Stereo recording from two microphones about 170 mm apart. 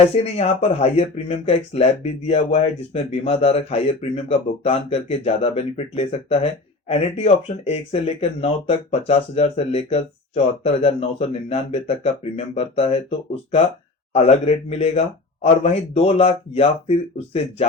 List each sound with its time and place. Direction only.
0.0 s speech: 40° left (ahead or behind)